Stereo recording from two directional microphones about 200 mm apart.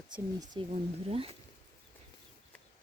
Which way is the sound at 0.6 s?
25° right (ahead or behind).